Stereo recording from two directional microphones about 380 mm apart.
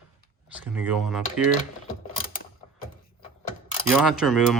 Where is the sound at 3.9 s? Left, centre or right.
Centre.